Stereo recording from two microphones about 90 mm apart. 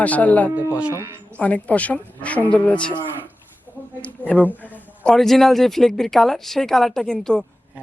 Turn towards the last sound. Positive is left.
turn(degrees=10)  # may be behind; listen again after turning